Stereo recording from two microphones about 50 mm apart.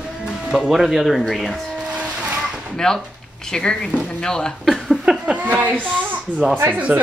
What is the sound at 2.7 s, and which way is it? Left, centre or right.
Speech, centre.